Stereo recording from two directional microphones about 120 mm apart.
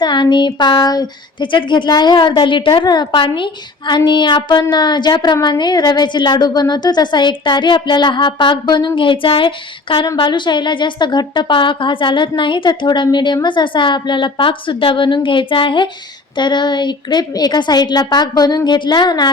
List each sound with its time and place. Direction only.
0.0 s a woman's voice: 40° left (ahead or behind)